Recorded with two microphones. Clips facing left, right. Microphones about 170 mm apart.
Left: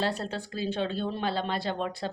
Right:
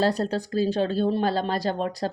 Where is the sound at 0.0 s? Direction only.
40° right (ahead or behind).